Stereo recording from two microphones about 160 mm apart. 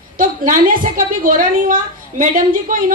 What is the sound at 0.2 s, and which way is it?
A woman's voice, 60° right (ahead or behind).